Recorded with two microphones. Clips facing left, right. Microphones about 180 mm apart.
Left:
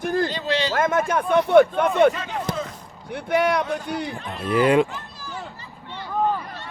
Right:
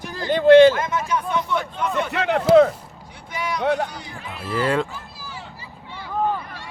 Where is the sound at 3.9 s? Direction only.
60° left (ahead or behind).